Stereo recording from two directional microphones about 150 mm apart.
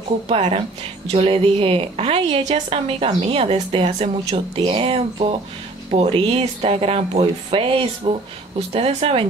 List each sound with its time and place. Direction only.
0.3 s speech: 40° right (ahead or behind)